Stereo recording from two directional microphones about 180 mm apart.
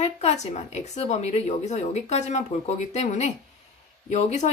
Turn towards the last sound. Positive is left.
turn(degrees=40)  # may be behind; listen again after turning